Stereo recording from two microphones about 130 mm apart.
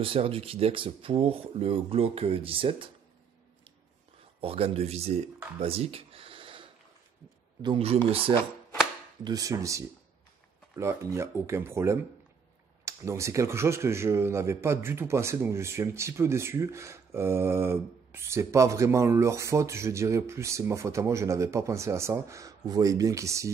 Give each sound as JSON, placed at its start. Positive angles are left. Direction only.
{"t": 0.0, "sound": "speech", "side_deg": -45}
{"t": 4.4, "sound": "speech", "side_deg": -45}
{"t": 5.6, "sound": "a sound", "side_deg": -50}
{"t": 7.6, "sound": "speech", "side_deg": -45}
{"t": 9.2, "sound": "speech", "side_deg": -30}